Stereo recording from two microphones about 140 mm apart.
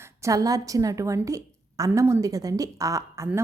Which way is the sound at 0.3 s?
25° right (ahead or behind).